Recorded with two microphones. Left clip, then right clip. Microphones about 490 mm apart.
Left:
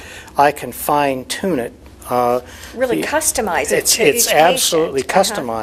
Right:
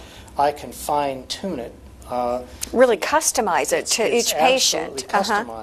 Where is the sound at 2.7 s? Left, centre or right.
Right.